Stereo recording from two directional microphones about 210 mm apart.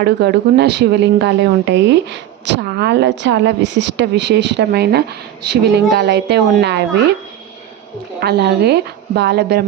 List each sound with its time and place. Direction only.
0.0 s a woman's voice: 50° right (ahead or behind)
8.2 s a woman's voice: 50° right (ahead or behind)